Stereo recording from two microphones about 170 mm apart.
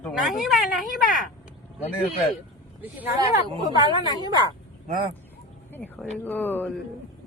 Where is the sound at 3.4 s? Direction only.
25° right (ahead or behind).